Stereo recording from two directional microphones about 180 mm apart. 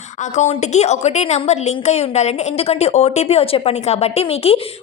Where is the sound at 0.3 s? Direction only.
40° left (ahead or behind).